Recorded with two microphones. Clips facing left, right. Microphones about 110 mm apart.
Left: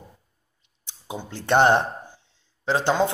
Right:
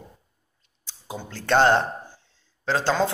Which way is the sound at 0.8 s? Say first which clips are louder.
Left 1 dB; 20° left (ahead or behind).